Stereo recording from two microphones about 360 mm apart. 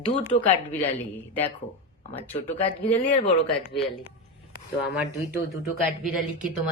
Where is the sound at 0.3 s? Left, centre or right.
Centre.